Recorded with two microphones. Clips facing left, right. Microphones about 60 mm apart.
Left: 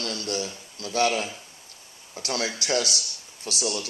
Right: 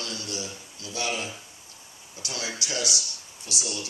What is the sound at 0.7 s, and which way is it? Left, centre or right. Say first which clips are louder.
Speech: left 7 dB; left.